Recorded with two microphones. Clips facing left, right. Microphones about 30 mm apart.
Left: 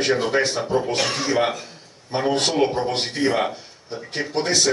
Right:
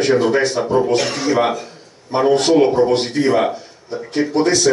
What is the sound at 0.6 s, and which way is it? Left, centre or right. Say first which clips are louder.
Speech: right 6 dB; right.